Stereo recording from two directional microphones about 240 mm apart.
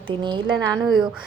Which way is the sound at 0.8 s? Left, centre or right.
Centre.